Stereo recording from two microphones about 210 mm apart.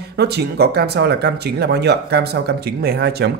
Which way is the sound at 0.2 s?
50° right (ahead or behind).